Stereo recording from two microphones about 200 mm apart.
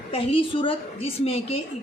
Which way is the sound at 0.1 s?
30° left (ahead or behind).